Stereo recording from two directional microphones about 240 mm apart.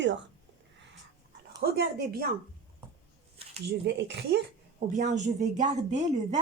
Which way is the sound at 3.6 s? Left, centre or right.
Right.